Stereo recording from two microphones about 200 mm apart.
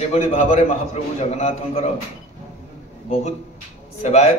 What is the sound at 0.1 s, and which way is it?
A man's voice, 35° left (ahead or behind).